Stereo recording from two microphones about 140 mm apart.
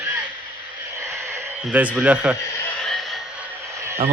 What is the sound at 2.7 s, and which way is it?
Music, 5° left (ahead or behind).